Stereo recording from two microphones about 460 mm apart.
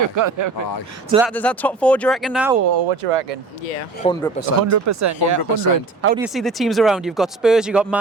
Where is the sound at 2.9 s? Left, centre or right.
Right.